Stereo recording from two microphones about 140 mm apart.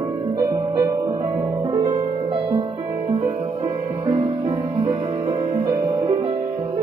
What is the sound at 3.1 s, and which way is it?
Music, 30° right (ahead or behind).